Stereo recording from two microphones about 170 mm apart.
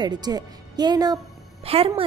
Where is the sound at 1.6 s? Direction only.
35° right (ahead or behind).